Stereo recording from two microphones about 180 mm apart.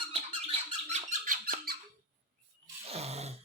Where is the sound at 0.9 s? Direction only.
45° right (ahead or behind).